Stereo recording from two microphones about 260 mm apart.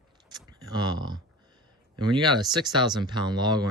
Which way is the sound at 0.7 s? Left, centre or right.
Centre.